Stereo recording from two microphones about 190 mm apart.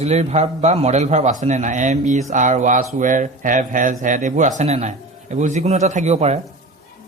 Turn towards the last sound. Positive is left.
turn(degrees=-35)  # may be behind; listen again after turning